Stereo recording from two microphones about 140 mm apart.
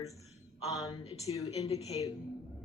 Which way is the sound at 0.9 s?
40° left (ahead or behind).